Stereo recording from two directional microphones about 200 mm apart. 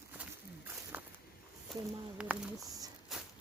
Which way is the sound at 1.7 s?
Centre (ahead or behind).